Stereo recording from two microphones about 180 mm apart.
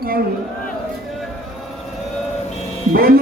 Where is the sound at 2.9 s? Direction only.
55° right (ahead or behind).